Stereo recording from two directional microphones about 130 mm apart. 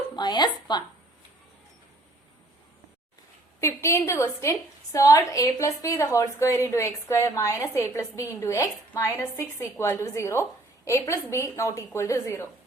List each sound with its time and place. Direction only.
0.2 s speech: 35° left (ahead or behind)
3.6 s a woman's voice: 20° left (ahead or behind)